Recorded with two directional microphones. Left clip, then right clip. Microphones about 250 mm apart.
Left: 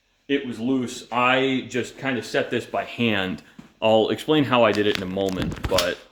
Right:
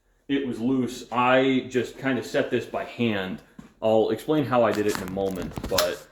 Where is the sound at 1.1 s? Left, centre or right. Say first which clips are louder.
Even; left.